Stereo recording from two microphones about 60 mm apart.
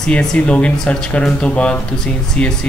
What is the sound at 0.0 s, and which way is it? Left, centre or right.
Speech, centre.